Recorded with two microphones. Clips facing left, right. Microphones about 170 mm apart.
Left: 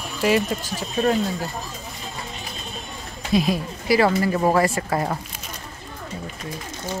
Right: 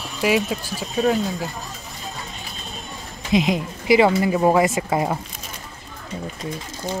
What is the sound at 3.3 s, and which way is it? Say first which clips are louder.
Speech: right 1 dB; 20° right (ahead or behind).